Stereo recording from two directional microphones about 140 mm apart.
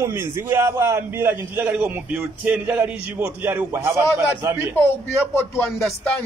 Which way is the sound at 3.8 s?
25° right (ahead or behind).